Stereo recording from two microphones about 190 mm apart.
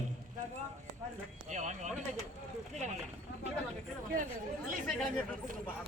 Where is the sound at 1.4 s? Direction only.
40° right (ahead or behind).